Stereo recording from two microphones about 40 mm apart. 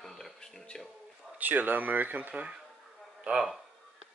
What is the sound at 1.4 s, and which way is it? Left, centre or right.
Speech, right.